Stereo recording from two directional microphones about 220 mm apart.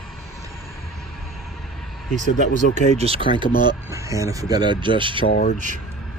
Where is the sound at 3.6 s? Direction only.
15° right (ahead or behind).